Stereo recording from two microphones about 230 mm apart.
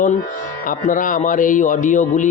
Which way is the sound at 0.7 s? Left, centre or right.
Left.